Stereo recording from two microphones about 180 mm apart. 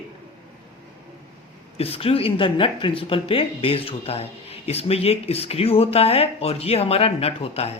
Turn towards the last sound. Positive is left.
turn(degrees=35)  # may be behind; listen again after turning